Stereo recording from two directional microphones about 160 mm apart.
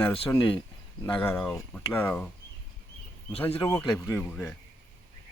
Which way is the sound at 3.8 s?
5° left (ahead or behind).